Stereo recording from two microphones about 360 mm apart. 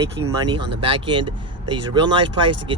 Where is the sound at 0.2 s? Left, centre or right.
Centre.